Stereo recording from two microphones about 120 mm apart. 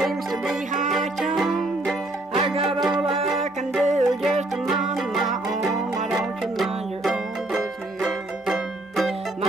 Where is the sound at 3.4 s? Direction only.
70° right (ahead or behind).